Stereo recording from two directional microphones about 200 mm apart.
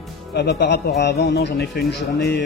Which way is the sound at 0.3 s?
55° left (ahead or behind).